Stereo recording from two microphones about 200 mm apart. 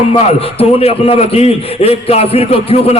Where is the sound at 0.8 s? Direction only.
30° left (ahead or behind).